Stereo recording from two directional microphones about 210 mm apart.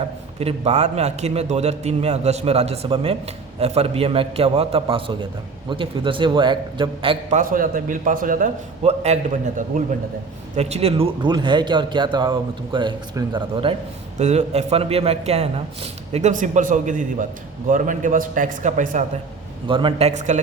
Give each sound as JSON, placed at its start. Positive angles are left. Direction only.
{"t": 0.3, "sound": "a man's voice", "side_deg": -30}
{"t": 19.6, "sound": "a man's voice", "side_deg": -25}